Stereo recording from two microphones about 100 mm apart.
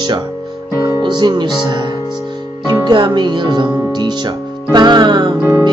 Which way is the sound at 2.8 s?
45° right (ahead or behind).